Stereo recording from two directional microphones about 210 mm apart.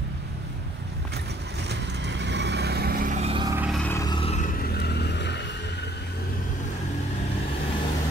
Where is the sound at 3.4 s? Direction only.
10° right (ahead or behind).